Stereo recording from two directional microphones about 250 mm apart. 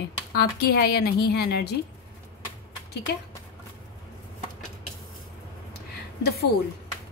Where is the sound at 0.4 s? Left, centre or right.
Left.